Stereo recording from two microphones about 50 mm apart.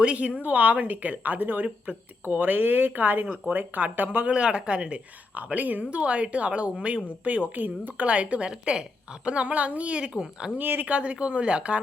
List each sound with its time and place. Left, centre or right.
0.0 s speech: right
4.3 s a woman's voice: centre
5.4 s a woman's voice: right
8.0 s a woman's voice: right
8.4 s a woman's voice: centre
10.6 s speech: right
10.8 s a woman's voice: right